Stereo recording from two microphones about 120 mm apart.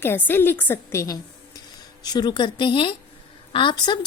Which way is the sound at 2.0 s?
35° left (ahead or behind).